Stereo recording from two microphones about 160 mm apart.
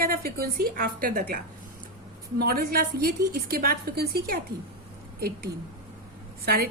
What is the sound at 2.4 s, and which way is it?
A woman's voice, 70° right (ahead or behind).